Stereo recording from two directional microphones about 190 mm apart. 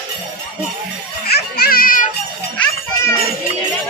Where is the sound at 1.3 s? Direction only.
55° left (ahead or behind).